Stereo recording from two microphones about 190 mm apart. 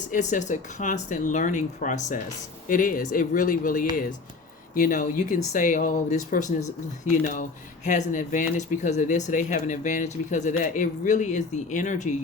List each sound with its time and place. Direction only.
0.1 s speech: 40° left (ahead or behind)